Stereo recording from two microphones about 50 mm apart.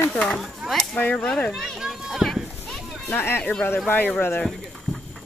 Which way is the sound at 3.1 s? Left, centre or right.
Left.